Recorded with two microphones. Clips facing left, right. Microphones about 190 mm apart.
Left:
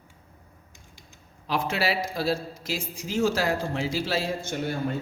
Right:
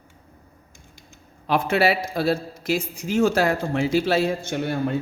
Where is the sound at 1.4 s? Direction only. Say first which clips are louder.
Right 7 dB; 60° right (ahead or behind).